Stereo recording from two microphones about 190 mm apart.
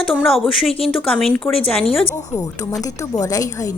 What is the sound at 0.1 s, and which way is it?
A woman's voice, centre (ahead or behind).